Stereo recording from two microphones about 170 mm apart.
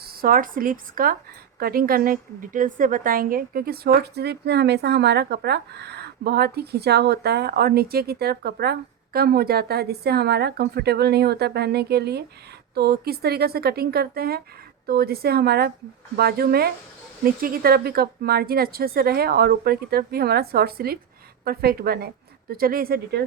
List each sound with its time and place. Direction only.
0.0 s a woman's voice: 60° right (ahead or behind)